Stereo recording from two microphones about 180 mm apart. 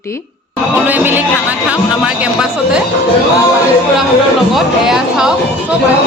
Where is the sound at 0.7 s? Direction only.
10° right (ahead or behind).